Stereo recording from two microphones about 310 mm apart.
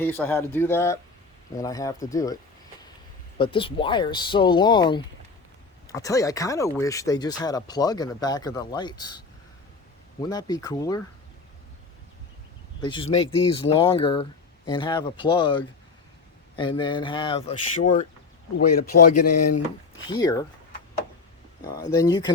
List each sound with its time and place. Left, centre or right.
0.0 s speech: centre
12.8 s speech: centre
18.9 s speech: left
20.1 s speech: centre
21.6 s speech: centre